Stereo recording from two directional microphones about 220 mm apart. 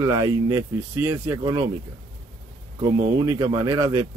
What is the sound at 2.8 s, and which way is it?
Speech, 15° right (ahead or behind).